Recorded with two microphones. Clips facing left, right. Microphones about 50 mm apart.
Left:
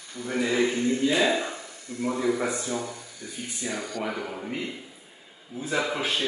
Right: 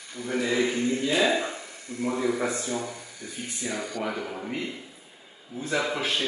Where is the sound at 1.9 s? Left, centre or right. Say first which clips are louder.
Even; right.